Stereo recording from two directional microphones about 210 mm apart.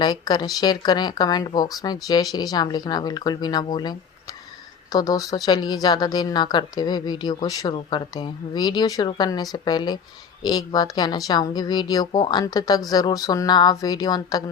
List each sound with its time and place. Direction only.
0.0 s speech: 20° left (ahead or behind)